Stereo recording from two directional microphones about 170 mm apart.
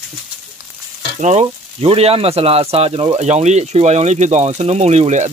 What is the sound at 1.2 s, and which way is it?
Speech, 40° right (ahead or behind).